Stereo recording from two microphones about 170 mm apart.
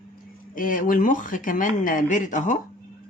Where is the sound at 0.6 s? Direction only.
50° left (ahead or behind).